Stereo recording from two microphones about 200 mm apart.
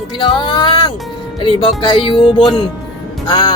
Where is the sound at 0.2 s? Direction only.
25° left (ahead or behind).